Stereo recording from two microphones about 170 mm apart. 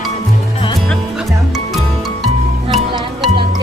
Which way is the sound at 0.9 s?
Centre (ahead or behind).